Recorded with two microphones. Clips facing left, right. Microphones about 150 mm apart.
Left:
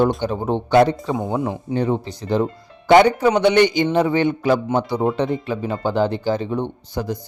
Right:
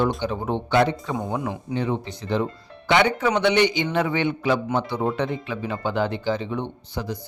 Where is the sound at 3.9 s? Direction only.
35° left (ahead or behind).